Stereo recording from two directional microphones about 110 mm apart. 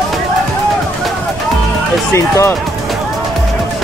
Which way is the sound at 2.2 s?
25° left (ahead or behind).